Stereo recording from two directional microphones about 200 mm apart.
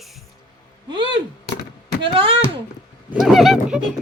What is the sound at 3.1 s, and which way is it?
Speech, centre (ahead or behind).